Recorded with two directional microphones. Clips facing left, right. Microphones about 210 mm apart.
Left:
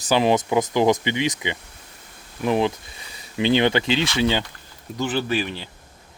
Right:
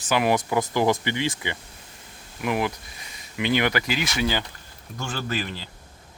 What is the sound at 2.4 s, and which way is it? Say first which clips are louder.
Speech: left 5 dB; 30° left (ahead or behind).